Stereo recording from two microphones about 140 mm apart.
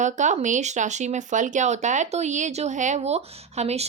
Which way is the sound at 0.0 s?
60° right (ahead or behind).